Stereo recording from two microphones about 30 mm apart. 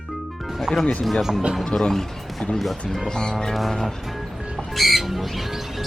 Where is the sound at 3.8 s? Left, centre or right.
Centre.